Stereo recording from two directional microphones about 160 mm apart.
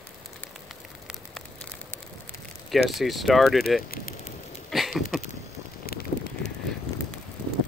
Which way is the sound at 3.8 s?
70° left (ahead or behind).